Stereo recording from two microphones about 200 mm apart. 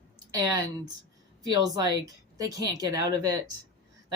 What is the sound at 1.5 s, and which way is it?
Speech, 20° right (ahead or behind).